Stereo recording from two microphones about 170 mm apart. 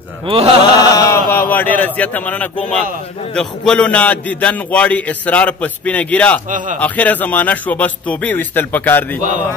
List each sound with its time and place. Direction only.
0.3 s mantra: 35° right (ahead or behind)
0.7 s a man's voice: 20° left (ahead or behind)